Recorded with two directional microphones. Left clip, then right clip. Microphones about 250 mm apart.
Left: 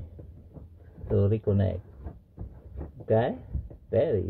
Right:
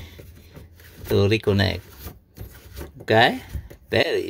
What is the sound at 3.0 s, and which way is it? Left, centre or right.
Speech, right.